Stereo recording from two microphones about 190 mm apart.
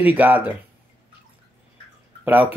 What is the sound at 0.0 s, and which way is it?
Speech, 10° right (ahead or behind).